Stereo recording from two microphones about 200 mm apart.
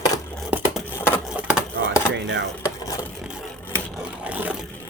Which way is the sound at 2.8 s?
15° left (ahead or behind).